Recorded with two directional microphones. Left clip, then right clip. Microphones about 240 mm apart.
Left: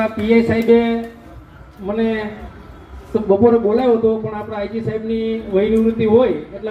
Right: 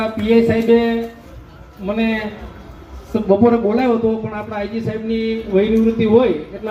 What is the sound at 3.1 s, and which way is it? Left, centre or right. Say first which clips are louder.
A man's voice: left 1 dB; right.